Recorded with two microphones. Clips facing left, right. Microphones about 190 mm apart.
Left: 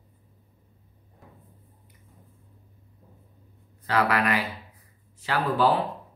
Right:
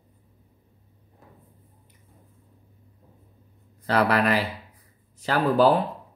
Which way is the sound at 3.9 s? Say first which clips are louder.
Right 3 dB; 35° right (ahead or behind).